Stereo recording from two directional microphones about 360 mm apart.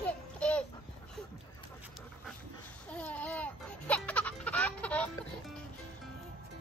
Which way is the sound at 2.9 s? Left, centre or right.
Centre.